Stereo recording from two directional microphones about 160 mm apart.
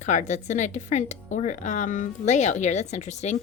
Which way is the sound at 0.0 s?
50° left (ahead or behind).